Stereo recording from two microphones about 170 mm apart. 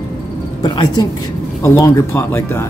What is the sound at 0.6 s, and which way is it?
A woman's voice, 25° left (ahead or behind).